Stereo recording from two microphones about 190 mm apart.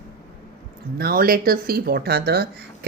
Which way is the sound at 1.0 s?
50° right (ahead or behind).